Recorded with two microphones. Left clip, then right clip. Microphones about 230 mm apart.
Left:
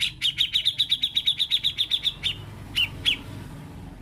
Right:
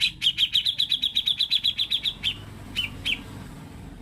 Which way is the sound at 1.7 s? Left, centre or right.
Centre.